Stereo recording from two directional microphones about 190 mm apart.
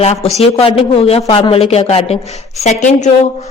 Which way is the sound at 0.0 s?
35° left (ahead or behind).